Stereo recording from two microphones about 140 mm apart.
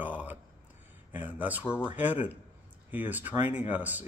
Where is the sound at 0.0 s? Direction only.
10° right (ahead or behind).